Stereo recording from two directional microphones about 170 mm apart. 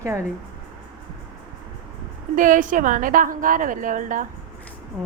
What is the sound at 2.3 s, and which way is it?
A woman's voice, 50° right (ahead or behind).